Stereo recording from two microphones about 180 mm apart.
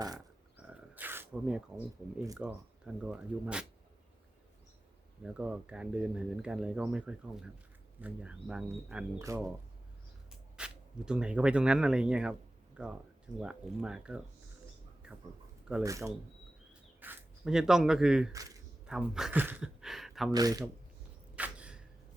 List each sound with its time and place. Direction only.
0.7 s speech: 10° right (ahead or behind)
5.2 s speech: 5° right (ahead or behind)
9.1 s speech: 15° right (ahead or behind)
10.6 s speech: 5° right (ahead or behind)
15.8 s speech: 15° right (ahead or behind)
18.3 s speech: 20° right (ahead or behind)
18.9 s speech: 5° right (ahead or behind)
20.3 s speech: 20° right (ahead or behind)
21.3 s a sound: 5° right (ahead or behind)